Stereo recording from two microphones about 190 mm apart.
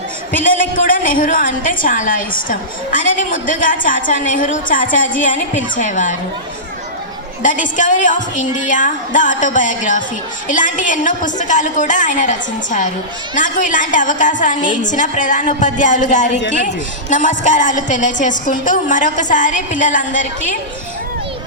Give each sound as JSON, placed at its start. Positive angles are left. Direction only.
{"t": 0.9, "sound": "a woman's voice", "side_deg": 45}
{"t": 7.4, "sound": "a woman's voice", "side_deg": 40}